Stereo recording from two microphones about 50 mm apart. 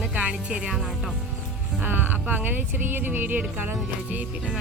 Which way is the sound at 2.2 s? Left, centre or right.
Right.